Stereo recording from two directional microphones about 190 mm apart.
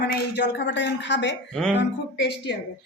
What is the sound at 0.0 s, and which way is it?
A woman's voice, 60° left (ahead or behind).